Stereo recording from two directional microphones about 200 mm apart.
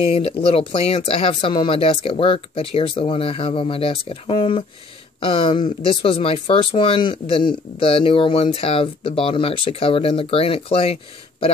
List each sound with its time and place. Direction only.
0.1 s speech: 30° left (ahead or behind)